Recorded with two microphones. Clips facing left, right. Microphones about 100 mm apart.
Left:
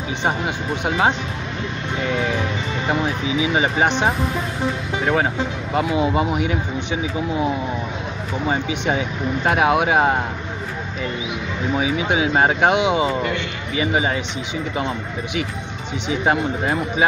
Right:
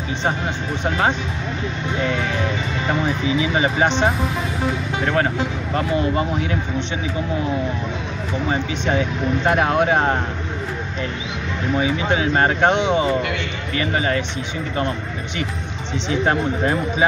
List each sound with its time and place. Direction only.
0.8 s speech: 5° left (ahead or behind)
5.0 s speech: 5° left (ahead or behind)
8.5 s speech: 5° left (ahead or behind)
11.7 s speech: 5° left (ahead or behind)